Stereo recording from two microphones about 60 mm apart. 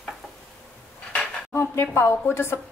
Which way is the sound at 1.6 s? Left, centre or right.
Left.